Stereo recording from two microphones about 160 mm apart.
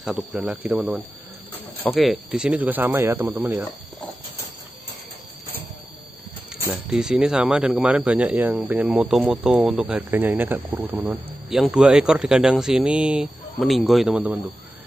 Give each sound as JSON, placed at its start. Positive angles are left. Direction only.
{"t": 0.0, "sound": "speech", "side_deg": 0}
{"t": 1.8, "sound": "speech", "side_deg": 0}
{"t": 6.7, "sound": "speech", "side_deg": -5}